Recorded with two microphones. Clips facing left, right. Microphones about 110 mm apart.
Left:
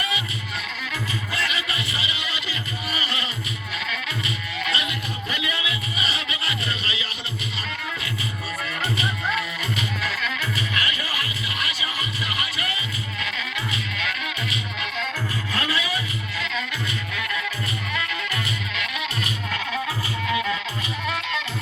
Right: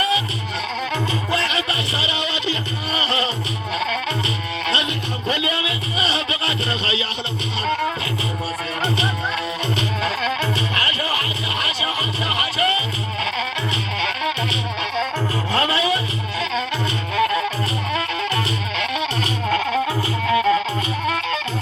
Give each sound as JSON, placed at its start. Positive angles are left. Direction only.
{"t": 1.3, "sound": "a sound", "side_deg": -30}
{"t": 3.8, "sound": "music", "side_deg": -35}
{"t": 8.8, "sound": "music", "side_deg": -30}
{"t": 15.5, "sound": "vehicle", "side_deg": -30}
{"t": 17.2, "sound": "music", "side_deg": -35}